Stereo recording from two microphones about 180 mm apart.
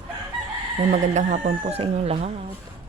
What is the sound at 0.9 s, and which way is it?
Speech, 40° right (ahead or behind).